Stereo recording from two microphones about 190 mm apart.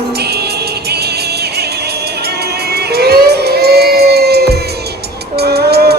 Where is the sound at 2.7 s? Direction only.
55° right (ahead or behind).